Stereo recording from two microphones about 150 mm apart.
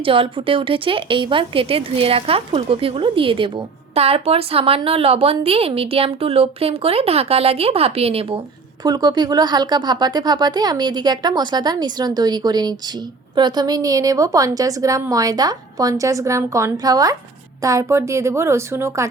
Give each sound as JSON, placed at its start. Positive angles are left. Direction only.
{"t": 0.0, "sound": "a woman's voice", "side_deg": -35}
{"t": 8.8, "sound": "speech", "side_deg": -25}